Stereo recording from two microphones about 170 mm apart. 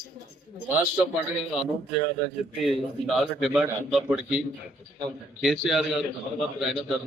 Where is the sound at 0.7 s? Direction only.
10° right (ahead or behind).